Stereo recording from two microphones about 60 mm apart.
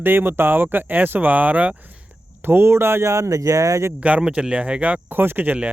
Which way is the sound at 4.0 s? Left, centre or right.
Right.